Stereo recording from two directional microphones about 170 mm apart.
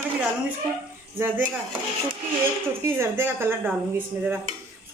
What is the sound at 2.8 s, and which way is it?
Speech, 15° right (ahead or behind).